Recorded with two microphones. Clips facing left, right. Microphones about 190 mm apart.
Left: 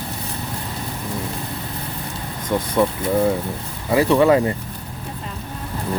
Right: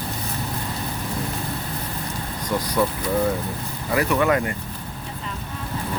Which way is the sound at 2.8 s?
20° left (ahead or behind).